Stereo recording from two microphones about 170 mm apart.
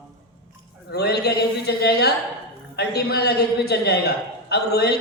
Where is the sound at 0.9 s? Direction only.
70° left (ahead or behind).